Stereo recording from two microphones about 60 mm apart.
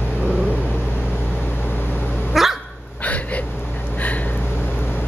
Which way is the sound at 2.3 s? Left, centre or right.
Centre.